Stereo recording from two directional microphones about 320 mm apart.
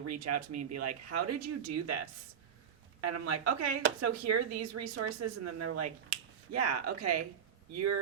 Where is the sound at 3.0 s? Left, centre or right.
Right.